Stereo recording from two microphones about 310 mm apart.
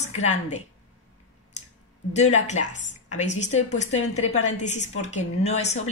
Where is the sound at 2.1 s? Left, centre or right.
Left.